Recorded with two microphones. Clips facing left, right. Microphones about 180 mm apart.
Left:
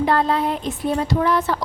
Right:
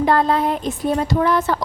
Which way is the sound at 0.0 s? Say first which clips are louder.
Right 2 dB; 45° right (ahead or behind).